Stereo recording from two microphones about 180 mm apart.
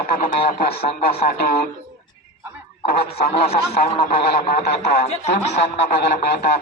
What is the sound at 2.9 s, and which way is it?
Speech, 60° left (ahead or behind).